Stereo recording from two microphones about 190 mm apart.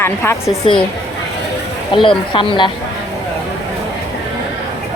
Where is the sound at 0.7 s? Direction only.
25° left (ahead or behind).